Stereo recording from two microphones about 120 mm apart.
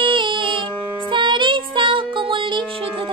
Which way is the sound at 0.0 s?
45° right (ahead or behind).